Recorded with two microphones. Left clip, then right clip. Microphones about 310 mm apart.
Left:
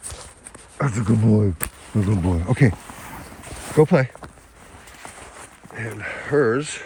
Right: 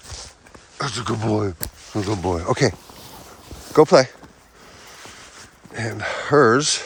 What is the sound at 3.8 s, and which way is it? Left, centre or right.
Speech, right.